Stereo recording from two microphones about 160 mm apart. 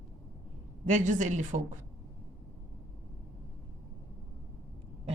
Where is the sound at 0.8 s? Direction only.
50° right (ahead or behind).